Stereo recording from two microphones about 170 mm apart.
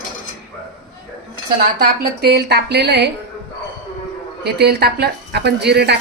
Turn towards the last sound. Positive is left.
turn(degrees=-75)  # may be behind; listen again after turning